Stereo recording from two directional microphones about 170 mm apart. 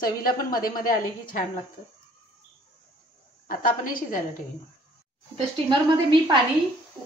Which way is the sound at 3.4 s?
55° left (ahead or behind).